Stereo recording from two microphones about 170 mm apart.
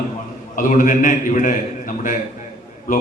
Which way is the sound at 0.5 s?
50° left (ahead or behind).